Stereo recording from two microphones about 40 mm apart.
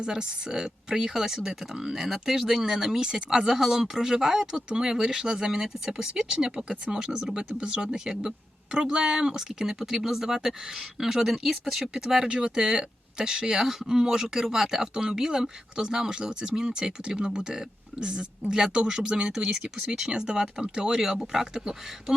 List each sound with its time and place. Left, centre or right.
0.0 s speech: right
12.3 s speech: right